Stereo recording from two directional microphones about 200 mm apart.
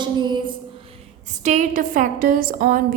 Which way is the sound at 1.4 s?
40° right (ahead or behind).